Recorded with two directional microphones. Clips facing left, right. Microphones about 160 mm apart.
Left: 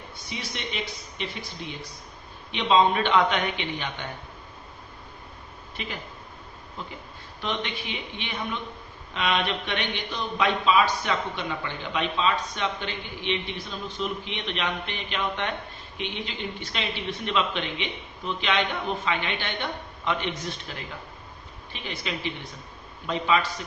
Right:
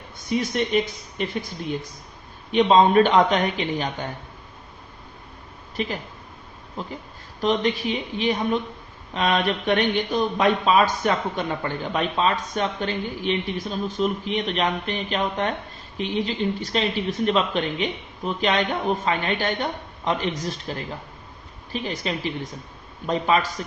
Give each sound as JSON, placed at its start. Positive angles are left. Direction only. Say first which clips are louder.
{"t": 0.3, "sound": "speech", "louder": "right 13 dB", "side_deg": -50}
{"t": 5.7, "sound": "speech", "louder": "right 8 dB", "side_deg": -40}